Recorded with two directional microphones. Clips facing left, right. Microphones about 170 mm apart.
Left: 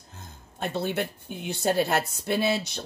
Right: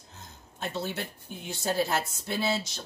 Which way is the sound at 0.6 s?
60° left (ahead or behind).